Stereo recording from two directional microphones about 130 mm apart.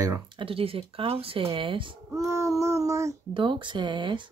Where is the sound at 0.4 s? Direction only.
45° right (ahead or behind).